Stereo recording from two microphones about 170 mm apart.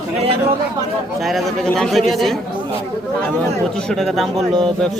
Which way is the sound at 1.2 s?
Centre (ahead or behind).